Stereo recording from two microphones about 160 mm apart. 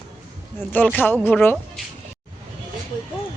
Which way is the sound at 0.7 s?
10° left (ahead or behind).